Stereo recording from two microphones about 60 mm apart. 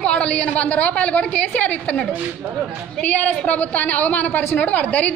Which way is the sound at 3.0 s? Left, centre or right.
Left.